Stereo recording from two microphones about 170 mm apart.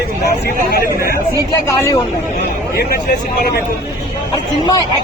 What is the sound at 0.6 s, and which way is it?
Speech, 60° left (ahead or behind).